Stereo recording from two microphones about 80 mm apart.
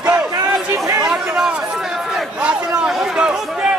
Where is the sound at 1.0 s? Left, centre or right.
Centre.